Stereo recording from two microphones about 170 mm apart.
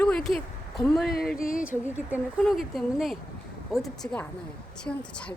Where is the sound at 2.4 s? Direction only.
Centre (ahead or behind).